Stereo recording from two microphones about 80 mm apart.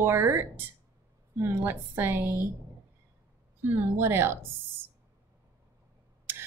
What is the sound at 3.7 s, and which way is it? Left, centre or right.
A woman's voice, right.